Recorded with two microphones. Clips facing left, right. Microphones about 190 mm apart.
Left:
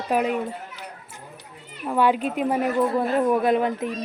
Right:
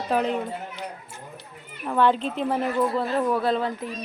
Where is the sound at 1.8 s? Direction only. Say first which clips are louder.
Left 1 dB; 10° left (ahead or behind).